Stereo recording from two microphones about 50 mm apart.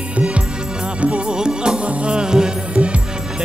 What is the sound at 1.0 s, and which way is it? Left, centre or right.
Music, right.